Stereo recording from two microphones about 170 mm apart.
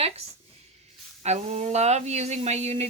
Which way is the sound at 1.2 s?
40° right (ahead or behind).